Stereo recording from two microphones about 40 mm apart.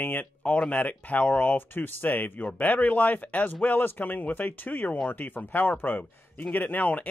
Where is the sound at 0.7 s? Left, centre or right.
Left.